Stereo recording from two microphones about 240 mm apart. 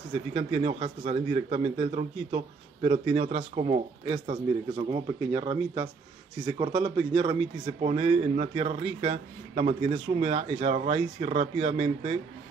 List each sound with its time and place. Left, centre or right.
0.1 s speech: right